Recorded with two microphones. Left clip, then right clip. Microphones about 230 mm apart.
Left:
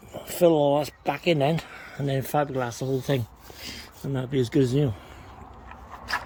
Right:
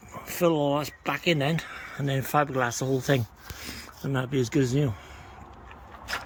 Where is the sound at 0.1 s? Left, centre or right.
Centre.